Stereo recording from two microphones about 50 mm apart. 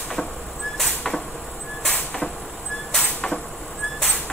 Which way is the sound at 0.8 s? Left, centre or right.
Centre.